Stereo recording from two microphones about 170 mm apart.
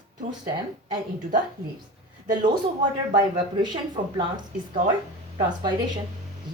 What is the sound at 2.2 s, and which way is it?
Speech, 50° right (ahead or behind).